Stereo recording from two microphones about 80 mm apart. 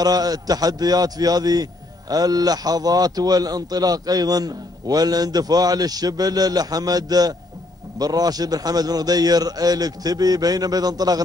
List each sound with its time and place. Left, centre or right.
0.0 s a man's voice: right